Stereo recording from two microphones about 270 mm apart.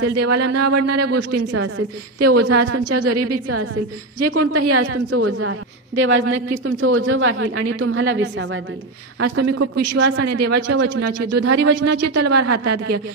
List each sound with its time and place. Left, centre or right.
0.0 s a woman's voice: right
9.2 s a woman's voice: right